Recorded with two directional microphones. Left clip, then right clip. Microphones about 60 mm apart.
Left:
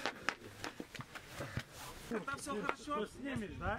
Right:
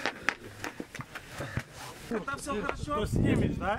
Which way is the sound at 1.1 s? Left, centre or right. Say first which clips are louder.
Right 7 dB; centre.